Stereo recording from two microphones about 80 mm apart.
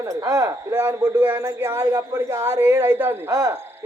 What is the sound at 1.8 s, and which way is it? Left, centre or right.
Speech, right.